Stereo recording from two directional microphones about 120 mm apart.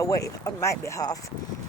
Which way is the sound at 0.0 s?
25° left (ahead or behind).